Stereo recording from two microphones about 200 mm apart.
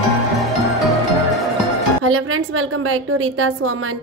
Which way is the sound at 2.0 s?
90° right.